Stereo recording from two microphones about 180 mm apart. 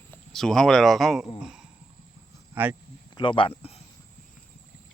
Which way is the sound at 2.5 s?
10° right (ahead or behind).